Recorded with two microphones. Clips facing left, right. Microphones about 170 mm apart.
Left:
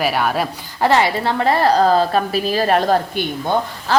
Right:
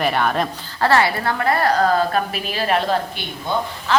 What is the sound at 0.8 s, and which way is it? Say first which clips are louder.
A woman's voice: left 2 dB; 20° left (ahead or behind).